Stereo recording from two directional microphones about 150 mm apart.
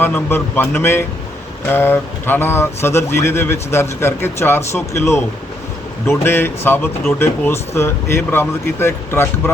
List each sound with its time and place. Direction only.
0.0 s speech: 15° left (ahead or behind)